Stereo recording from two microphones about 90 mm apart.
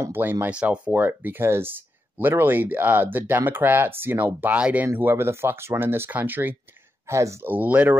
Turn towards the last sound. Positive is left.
turn(degrees=-20)  # may be behind; listen again after turning